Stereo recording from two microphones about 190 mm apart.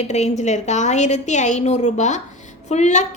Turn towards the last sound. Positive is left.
turn(degrees=40)  # may be behind; listen again after turning